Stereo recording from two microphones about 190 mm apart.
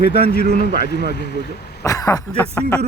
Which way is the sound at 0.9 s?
60° left (ahead or behind).